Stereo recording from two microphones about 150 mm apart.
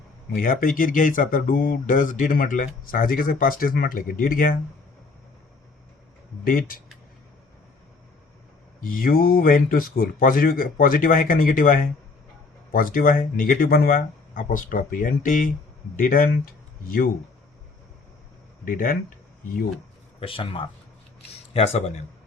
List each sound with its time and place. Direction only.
0.3 s speech: 65° left (ahead or behind)
6.4 s speech: 70° left (ahead or behind)
8.8 s speech: 65° left (ahead or behind)
18.6 s speech: 65° left (ahead or behind)
20.1 s speech: 35° left (ahead or behind)